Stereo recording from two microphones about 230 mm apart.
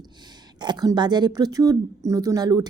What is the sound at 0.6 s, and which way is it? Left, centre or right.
A woman's voice, centre.